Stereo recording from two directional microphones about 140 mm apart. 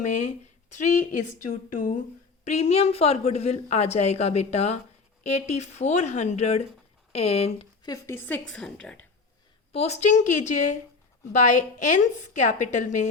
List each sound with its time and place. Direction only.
0.7 s a woman's voice: 65° left (ahead or behind)
2.4 s a woman's voice: 55° left (ahead or behind)
7.9 s speech: 20° left (ahead or behind)
8.4 s a woman's voice: 5° left (ahead or behind)
9.7 s a woman's voice: 50° left (ahead or behind)
11.8 s a woman's voice: 60° left (ahead or behind)